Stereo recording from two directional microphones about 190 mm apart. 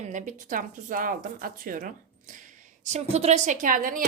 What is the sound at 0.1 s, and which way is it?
A woman's voice, 45° right (ahead or behind).